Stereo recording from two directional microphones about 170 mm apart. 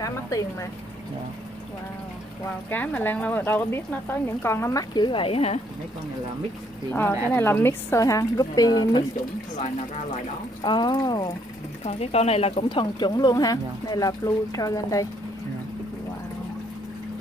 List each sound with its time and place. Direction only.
0.0 s speech: 20° left (ahead or behind)
2.7 s speech: 10° left (ahead or behind); by 5.6 s 35° left (ahead or behind)
6.9 s speech: 10° left (ahead or behind)
10.6 s speech: 25° left (ahead or behind)
11.8 s speech: 35° left (ahead or behind); by 15.0 s 20° left (ahead or behind)